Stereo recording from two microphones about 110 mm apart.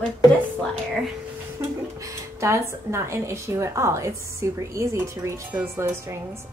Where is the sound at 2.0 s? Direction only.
25° right (ahead or behind).